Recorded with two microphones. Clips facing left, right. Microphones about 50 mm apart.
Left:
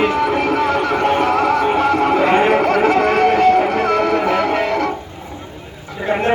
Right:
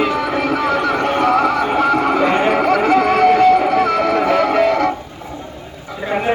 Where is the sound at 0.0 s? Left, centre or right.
Left.